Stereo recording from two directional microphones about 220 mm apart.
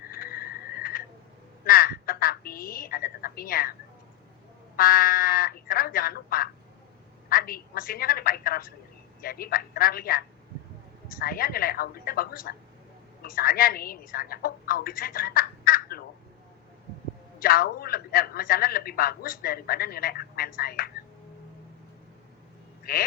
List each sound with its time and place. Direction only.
0.1 s frog: 40° left (ahead or behind)
1.6 s telephone: 40° left (ahead or behind)
4.8 s a sound: 40° left (ahead or behind)
7.3 s telephone: 40° left (ahead or behind)
9.2 s a man's voice: 40° left (ahead or behind)
17.4 s a man's voice: 40° left (ahead or behind)
22.8 s speech: 40° left (ahead or behind)